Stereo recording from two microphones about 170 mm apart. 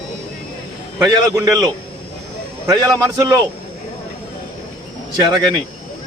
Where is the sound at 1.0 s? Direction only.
20° right (ahead or behind).